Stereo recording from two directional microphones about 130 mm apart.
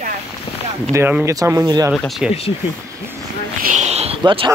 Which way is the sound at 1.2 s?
25° right (ahead or behind).